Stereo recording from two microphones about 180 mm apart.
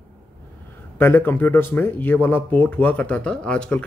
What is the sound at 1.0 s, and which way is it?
Speech, 10° left (ahead or behind).